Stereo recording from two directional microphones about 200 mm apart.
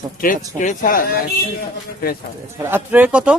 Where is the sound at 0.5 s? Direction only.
40° left (ahead or behind).